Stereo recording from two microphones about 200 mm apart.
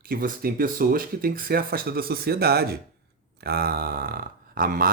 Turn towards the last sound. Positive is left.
turn(degrees=-45)  # may be behind; listen again after turning